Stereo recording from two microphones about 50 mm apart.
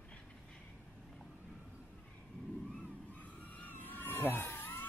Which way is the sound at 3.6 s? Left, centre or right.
Left.